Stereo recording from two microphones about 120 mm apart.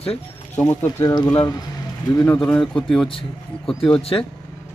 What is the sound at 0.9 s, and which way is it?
Speech, 30° left (ahead or behind).